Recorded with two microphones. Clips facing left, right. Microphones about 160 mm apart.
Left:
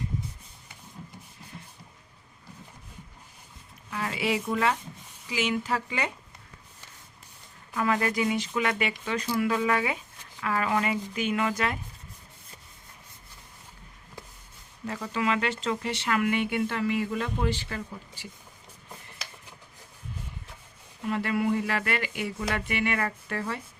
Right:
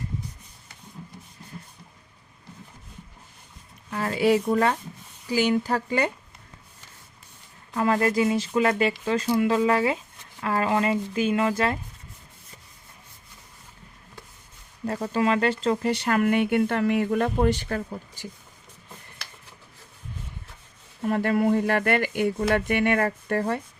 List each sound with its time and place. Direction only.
3.8 s speech: 45° right (ahead or behind)
7.7 s speech: 35° right (ahead or behind)
14.8 s speech: 40° right (ahead or behind)
21.0 s speech: 45° right (ahead or behind)